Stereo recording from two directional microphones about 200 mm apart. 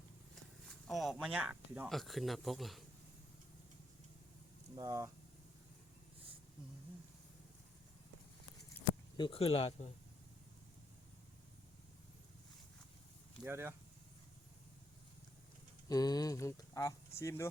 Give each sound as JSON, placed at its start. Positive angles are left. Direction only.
{"t": 0.7, "sound": "speech", "side_deg": 0}
{"t": 4.7, "sound": "speech", "side_deg": -20}
{"t": 9.1, "sound": "speech", "side_deg": 25}
{"t": 13.4, "sound": "speech", "side_deg": -10}
{"t": 15.9, "sound": "speech", "side_deg": 20}